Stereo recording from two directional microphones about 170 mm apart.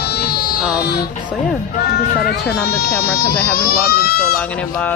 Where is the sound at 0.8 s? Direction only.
70° left (ahead or behind).